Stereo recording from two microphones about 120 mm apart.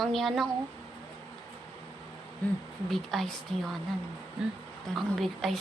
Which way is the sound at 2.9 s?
Centre (ahead or behind).